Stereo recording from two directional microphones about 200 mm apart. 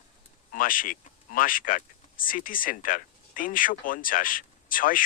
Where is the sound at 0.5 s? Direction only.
45° left (ahead or behind).